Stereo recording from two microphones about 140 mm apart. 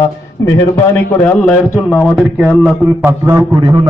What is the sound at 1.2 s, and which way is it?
Speech, 10° left (ahead or behind).